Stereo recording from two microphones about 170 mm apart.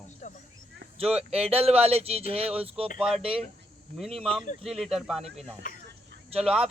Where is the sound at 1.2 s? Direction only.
35° right (ahead or behind).